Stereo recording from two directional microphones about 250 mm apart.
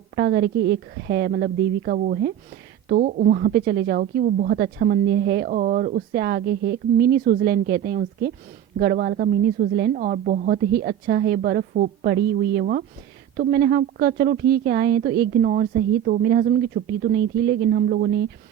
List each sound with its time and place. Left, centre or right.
0.2 s a woman's voice: right